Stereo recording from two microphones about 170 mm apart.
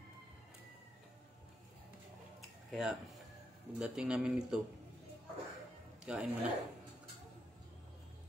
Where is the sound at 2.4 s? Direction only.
Centre (ahead or behind).